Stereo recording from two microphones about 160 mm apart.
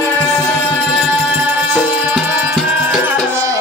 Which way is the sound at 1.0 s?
10° right (ahead or behind).